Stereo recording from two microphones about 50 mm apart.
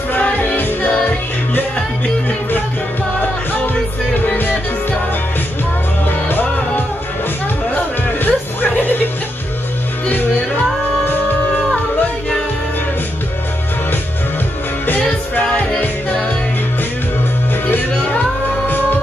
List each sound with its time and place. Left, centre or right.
0.1 s music: left
6.0 s music: left
7.7 s music: left
14.9 s music: left
17.6 s music: left